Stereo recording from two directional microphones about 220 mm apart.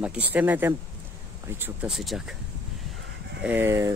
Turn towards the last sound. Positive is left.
turn(degrees=-10)  # may be behind; listen again after turning